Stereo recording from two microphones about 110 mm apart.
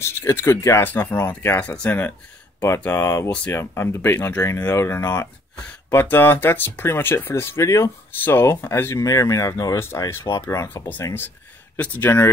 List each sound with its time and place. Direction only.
0.0 s speech: 25° left (ahead or behind)